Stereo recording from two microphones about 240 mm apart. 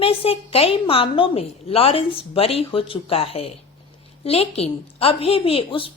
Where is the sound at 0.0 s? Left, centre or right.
Left.